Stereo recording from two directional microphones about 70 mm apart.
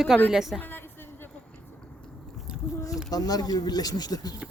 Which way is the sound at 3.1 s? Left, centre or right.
Left.